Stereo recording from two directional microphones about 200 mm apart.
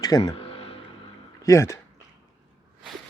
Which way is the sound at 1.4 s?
15° left (ahead or behind).